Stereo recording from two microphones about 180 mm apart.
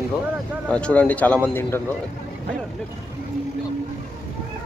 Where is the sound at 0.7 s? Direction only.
5° left (ahead or behind).